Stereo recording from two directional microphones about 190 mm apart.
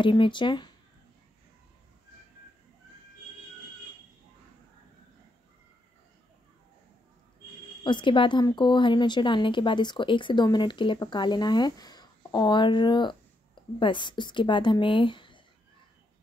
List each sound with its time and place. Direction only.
0.0 s speech: 25° left (ahead or behind)
7.8 s speech: 25° left (ahead or behind)